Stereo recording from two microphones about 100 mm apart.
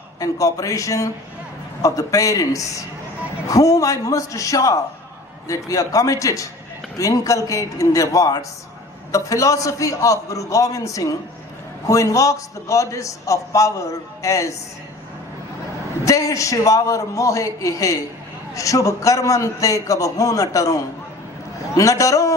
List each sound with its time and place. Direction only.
0.2 s a man's voice: 35° left (ahead or behind)
16.0 s a man's voice: 35° left (ahead or behind)